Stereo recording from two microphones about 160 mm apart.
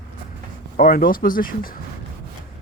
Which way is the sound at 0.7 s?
65° left (ahead or behind).